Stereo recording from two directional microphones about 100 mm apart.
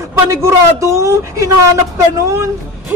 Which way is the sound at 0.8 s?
30° right (ahead or behind).